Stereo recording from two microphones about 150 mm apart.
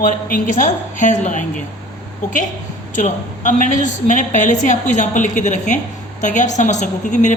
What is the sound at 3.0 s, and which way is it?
A woman's voice, 55° left (ahead or behind).